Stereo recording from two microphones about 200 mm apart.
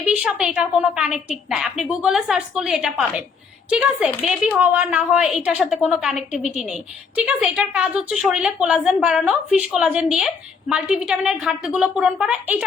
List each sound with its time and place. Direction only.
0.0 s a woman's voice: 5° right (ahead or behind)